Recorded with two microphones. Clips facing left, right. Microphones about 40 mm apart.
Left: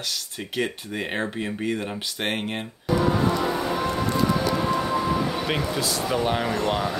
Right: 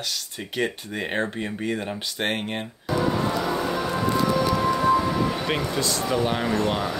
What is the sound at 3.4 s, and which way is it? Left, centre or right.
Music, centre.